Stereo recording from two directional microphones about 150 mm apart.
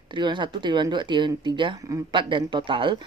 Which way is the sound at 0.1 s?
30° right (ahead or behind).